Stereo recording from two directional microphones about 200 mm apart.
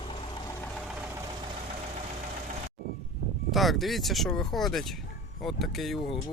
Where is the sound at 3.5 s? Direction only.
Centre (ahead or behind).